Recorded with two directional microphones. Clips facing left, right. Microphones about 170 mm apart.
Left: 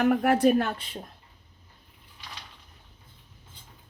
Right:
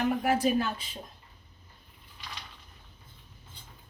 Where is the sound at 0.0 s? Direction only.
65° left (ahead or behind).